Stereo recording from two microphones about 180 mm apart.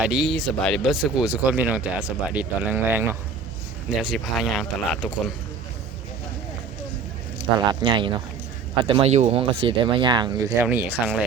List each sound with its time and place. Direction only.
0.0 s speech: centre (ahead or behind)
4.1 s speech: centre (ahead or behind)
7.7 s speech: 25° right (ahead or behind); by 11.3 s 5° right (ahead or behind)